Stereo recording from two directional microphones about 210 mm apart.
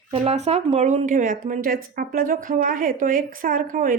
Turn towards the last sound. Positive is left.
turn(degrees=-40)  # may be behind; listen again after turning